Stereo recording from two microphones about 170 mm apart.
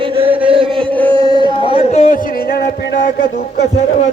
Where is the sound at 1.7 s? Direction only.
40° left (ahead or behind).